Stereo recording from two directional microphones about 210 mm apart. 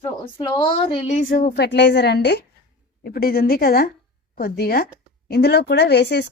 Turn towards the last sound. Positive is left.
turn(degrees=55)  # may be behind; listen again after turning